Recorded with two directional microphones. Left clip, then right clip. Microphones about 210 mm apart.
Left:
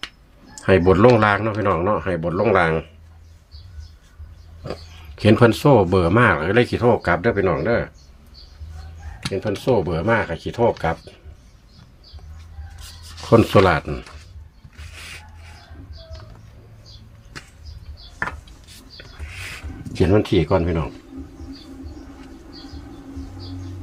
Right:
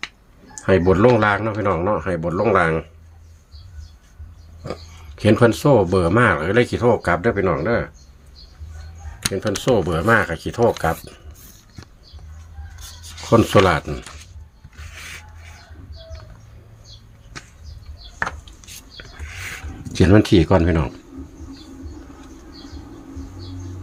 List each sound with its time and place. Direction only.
0.5 s speech: 5° left (ahead or behind)
4.6 s a sound: 5° right (ahead or behind)
5.1 s speech: 5° left (ahead or behind)
9.3 s speech: 10° right (ahead or behind)
13.2 s speech: centre (ahead or behind)
19.9 s speech: 40° right (ahead or behind)